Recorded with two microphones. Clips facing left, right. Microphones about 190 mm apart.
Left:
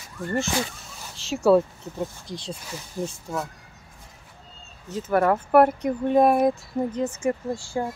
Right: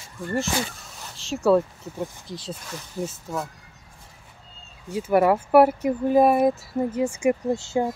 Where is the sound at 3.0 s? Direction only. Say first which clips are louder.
Even; 10° left (ahead or behind).